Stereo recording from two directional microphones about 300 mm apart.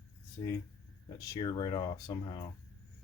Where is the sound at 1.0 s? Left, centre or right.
Centre.